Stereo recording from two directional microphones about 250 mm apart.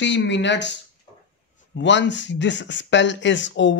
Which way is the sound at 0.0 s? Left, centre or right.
Left.